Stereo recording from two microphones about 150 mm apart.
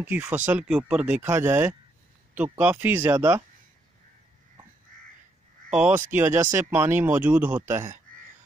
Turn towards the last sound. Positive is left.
turn(degrees=-15)  # may be behind; listen again after turning